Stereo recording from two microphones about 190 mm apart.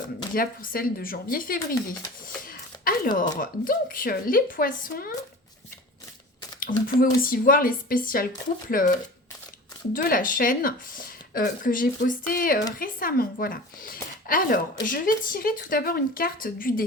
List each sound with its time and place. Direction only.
0.3 s a woman's voice: 50° left (ahead or behind)
6.7 s a woman's voice: 50° left (ahead or behind)